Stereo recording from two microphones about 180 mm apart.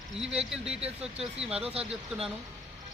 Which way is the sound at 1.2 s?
5° right (ahead or behind).